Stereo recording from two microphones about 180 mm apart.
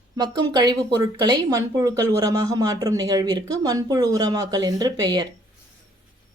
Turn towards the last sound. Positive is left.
turn(degrees=-20)  # may be behind; listen again after turning